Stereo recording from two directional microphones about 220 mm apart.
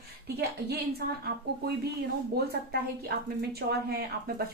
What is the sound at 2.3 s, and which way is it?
Speech, 45° right (ahead or behind).